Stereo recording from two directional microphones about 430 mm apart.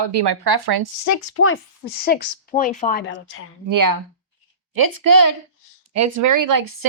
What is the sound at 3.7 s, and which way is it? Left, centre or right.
Speech, right.